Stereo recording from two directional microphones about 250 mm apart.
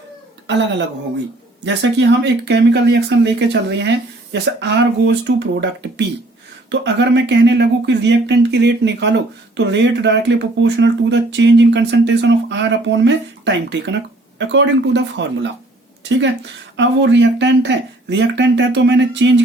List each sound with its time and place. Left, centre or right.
0.4 s speech: right
16.7 s speech: right